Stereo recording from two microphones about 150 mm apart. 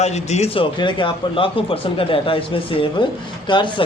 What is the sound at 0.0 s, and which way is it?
A man's voice, 45° left (ahead or behind).